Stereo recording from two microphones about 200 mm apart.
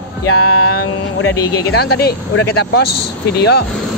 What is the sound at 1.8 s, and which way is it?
Speech, 50° left (ahead or behind).